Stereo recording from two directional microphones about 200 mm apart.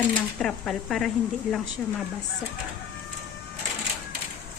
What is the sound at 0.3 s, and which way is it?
Speech, 5° left (ahead or behind).